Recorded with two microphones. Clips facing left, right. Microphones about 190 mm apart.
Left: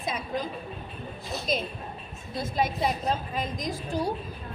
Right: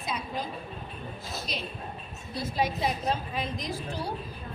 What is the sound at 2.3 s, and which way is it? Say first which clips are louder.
A woman's voice: left 1 dB; 45° left (ahead or behind).